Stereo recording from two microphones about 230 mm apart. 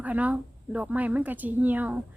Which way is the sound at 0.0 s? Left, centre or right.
Centre.